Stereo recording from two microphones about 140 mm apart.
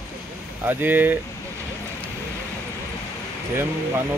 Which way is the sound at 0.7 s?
15° right (ahead or behind).